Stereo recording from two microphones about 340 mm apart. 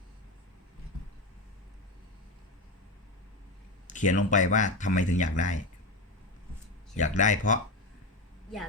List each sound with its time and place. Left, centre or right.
3.8 s a sound: left
4.3 s speech: left
6.9 s speech: left